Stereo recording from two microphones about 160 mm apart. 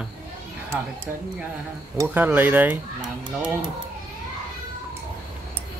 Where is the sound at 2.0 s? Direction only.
10° right (ahead or behind).